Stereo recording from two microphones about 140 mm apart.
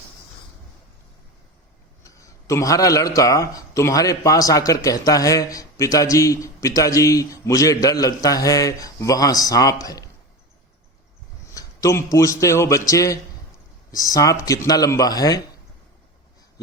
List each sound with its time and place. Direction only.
2.0 s speech: 25° left (ahead or behind)
11.5 s speech: 25° left (ahead or behind)